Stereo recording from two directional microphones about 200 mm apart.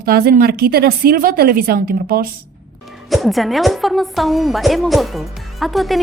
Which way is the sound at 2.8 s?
Centre (ahead or behind).